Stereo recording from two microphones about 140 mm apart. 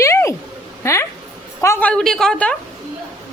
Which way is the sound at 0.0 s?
20° left (ahead or behind).